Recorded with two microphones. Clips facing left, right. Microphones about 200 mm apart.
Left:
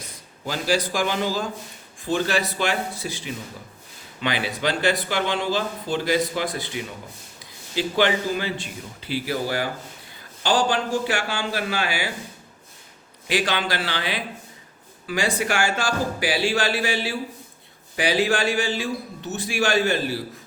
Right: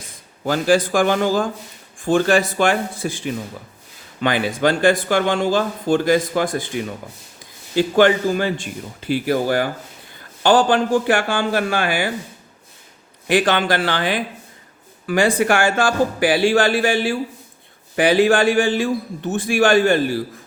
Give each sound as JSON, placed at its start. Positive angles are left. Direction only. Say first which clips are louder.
{"t": 0.4, "sound": "speech", "louder": "right 7 dB", "side_deg": -50}
{"t": 7.8, "sound": "speech", "louder": "right 7 dB", "side_deg": -50}
{"t": 13.2, "sound": "speech", "louder": "right 7 dB", "side_deg": -55}